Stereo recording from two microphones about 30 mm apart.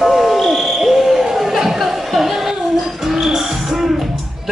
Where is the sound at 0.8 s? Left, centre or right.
Centre.